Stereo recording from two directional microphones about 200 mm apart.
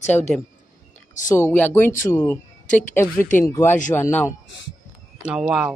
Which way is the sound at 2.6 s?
40° left (ahead or behind).